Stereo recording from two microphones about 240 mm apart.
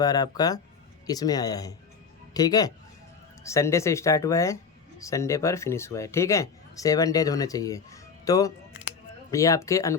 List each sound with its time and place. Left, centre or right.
0.0 s speech: centre